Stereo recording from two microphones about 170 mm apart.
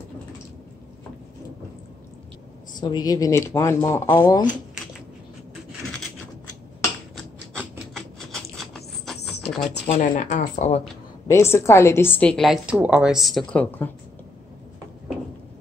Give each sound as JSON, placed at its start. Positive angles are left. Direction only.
{"t": 2.8, "sound": "a woman's voice", "side_deg": 25}
{"t": 7.2, "sound": "rodents", "side_deg": 5}
{"t": 9.4, "sound": "a sound", "side_deg": 0}
{"t": 9.8, "sound": "speech", "side_deg": 50}
{"t": 11.2, "sound": "a woman's voice", "side_deg": 15}